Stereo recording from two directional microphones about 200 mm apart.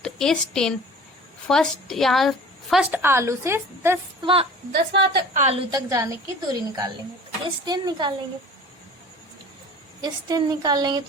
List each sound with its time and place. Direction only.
0.0 s a woman's voice: 5° left (ahead or behind); by 4.0 s 10° right (ahead or behind)
4.2 s a woman's voice: 25° right (ahead or behind)
4.7 s a woman's voice: 60° right (ahead or behind)
5.3 s a woman's voice: 35° right (ahead or behind)
5.7 s a woman's voice: 15° right (ahead or behind)
10.0 s a woman's voice: 20° right (ahead or behind)